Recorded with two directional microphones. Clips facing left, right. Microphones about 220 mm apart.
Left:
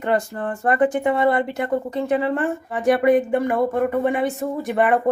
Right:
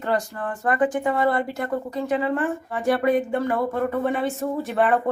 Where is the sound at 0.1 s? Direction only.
25° left (ahead or behind).